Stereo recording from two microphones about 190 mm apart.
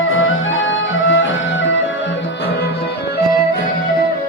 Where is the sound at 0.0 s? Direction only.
90° left.